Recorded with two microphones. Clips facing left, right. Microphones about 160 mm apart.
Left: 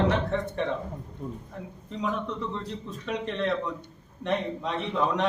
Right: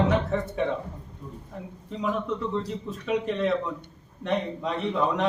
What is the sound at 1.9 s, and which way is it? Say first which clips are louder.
A man's voice: right 2 dB; centre (ahead or behind).